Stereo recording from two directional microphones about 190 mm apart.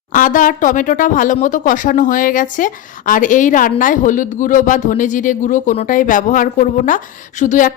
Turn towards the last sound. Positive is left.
turn(degrees=40)  # may be behind; listen again after turning